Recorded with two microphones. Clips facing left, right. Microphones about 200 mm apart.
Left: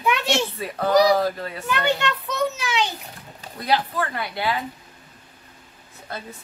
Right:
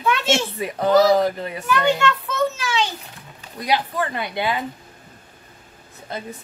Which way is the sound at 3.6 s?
15° right (ahead or behind).